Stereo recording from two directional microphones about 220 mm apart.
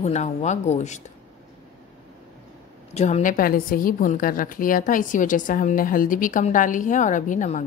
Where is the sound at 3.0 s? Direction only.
30° left (ahead or behind).